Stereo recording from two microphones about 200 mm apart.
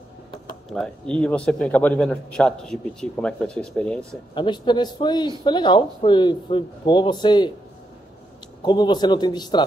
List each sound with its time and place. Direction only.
0.7 s a man's voice: 5° left (ahead or behind)
4.4 s speech: 20° left (ahead or behind)
8.6 s speech: 20° left (ahead or behind)